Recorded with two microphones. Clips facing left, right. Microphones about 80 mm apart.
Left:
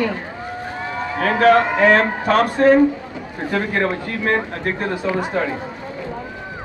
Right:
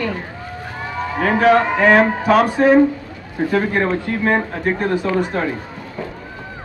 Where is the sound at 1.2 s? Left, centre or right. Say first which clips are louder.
Even; centre.